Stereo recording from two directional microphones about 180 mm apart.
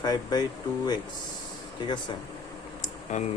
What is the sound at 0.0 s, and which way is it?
Speech, 20° left (ahead or behind).